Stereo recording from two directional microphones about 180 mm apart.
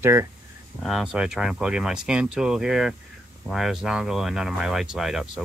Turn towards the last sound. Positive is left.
turn(degrees=0)  # may be behind; listen again after turning